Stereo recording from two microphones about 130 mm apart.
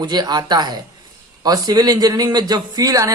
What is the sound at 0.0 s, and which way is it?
Speech, 35° right (ahead or behind).